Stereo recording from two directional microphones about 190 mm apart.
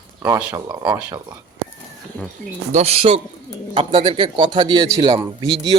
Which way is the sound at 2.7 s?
35° right (ahead or behind).